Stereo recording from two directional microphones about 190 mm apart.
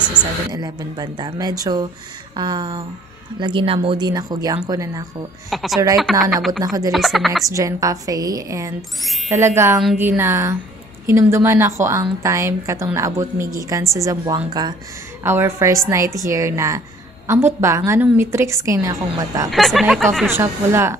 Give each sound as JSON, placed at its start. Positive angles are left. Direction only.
{"t": 0.2, "sound": "a woman's voice", "side_deg": -5}
{"t": 0.5, "sound": "speech", "side_deg": -20}
{"t": 5.5, "sound": "speech", "side_deg": 0}
{"t": 6.6, "sound": "speech", "side_deg": -20}
{"t": 6.9, "sound": "speech", "side_deg": 0}
{"t": 7.4, "sound": "a woman's voice", "side_deg": -15}
{"t": 19.5, "sound": "speech", "side_deg": 0}
{"t": 20.2, "sound": "a woman's voice", "side_deg": -15}